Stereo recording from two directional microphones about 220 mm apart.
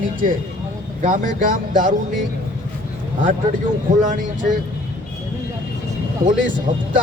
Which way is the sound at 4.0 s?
35° right (ahead or behind).